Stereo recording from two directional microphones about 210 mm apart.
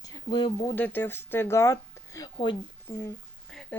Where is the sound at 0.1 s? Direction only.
20° left (ahead or behind).